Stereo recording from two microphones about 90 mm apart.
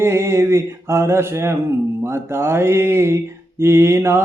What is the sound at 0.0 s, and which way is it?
Speech, 30° right (ahead or behind).